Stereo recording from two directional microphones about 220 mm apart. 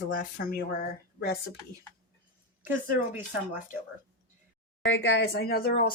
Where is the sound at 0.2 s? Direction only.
40° left (ahead or behind).